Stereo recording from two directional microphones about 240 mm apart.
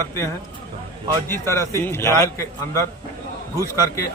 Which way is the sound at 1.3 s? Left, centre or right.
Centre.